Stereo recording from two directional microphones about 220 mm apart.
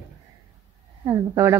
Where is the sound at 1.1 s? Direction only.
10° right (ahead or behind).